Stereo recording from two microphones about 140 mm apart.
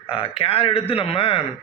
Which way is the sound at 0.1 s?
40° left (ahead or behind).